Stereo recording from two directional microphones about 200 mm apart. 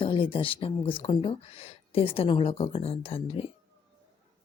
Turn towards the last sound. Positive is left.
turn(degrees=30)  # may be behind; listen again after turning